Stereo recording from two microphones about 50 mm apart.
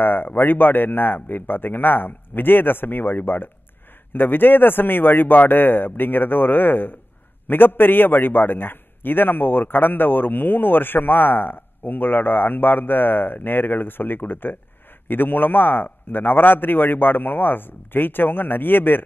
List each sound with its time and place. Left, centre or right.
0.0 s a man's voice: left